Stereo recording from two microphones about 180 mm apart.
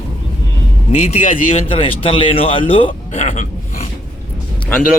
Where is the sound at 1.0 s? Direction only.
45° left (ahead or behind).